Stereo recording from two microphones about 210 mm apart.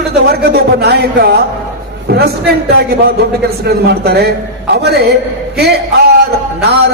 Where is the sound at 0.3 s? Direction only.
50° right (ahead or behind).